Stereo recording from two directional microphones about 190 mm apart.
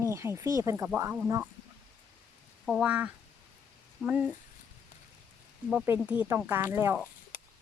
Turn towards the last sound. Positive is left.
turn(degrees=45)  # may be behind; listen again after turning